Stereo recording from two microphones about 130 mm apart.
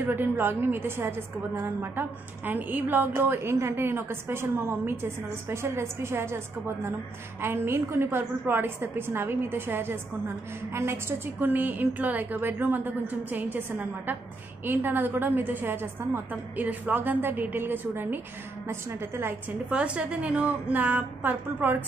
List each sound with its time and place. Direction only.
0.0 s a woman's voice: 15° right (ahead or behind)